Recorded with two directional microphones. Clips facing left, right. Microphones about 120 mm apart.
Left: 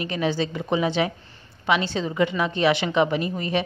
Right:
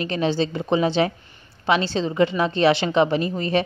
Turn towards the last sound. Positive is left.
turn(degrees=-30)  # may be behind; listen again after turning